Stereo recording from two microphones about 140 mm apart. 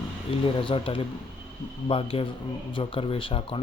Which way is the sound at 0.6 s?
40° left (ahead or behind).